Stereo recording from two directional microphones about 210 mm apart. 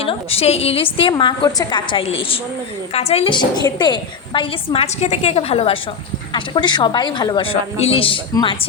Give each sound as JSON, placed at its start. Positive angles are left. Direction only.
{"t": 0.0, "sound": "a woman's voice", "side_deg": 30}